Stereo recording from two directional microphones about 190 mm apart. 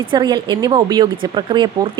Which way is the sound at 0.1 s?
25° right (ahead or behind).